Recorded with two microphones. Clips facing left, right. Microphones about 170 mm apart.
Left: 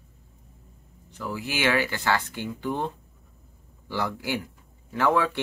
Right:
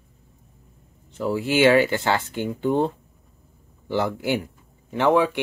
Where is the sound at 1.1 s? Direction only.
30° right (ahead or behind).